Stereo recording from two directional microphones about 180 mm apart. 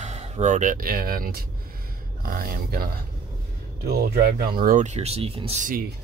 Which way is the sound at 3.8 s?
55° right (ahead or behind).